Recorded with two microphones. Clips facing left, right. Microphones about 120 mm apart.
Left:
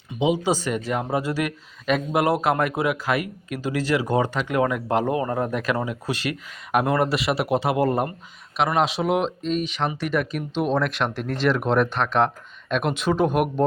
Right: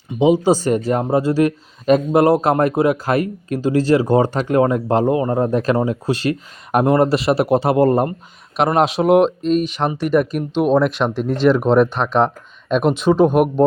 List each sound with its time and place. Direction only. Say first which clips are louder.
0.2 s speech: right 8 dB; 40° right (ahead or behind)
8.5 s speech: right 6 dB; 45° right (ahead or behind)
10.8 s speech: right 7 dB; centre (ahead or behind)
11.5 s speech: right 7 dB; 35° right (ahead or behind)